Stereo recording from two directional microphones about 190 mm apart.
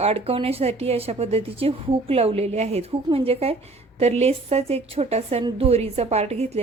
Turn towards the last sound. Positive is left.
turn(degrees=-35)  # may be behind; listen again after turning